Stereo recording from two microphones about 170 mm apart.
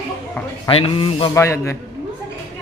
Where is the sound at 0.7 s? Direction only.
35° left (ahead or behind).